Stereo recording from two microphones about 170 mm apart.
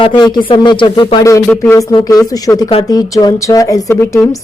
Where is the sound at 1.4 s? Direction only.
10° left (ahead or behind).